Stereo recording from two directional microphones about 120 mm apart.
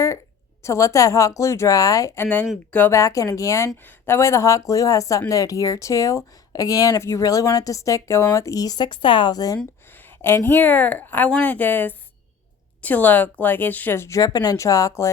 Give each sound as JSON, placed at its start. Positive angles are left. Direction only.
{"t": 0.6, "sound": "speech", "side_deg": 25}
{"t": 10.2, "sound": "speech", "side_deg": 20}